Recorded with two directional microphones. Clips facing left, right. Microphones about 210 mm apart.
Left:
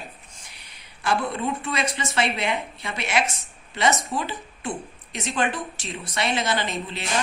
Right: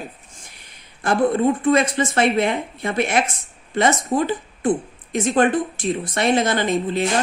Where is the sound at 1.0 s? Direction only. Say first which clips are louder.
Right 8 dB; 50° right (ahead or behind).